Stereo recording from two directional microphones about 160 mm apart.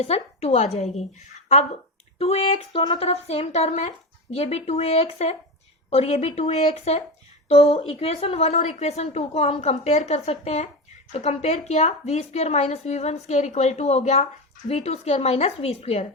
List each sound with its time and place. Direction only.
0.0 s speech: 40° left (ahead or behind)
2.1 s speech: 40° left (ahead or behind)